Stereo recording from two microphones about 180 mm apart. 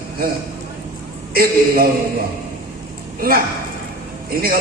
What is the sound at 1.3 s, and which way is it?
Speech, 55° right (ahead or behind).